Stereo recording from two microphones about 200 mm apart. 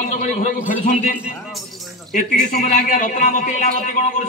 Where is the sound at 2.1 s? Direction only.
45° left (ahead or behind).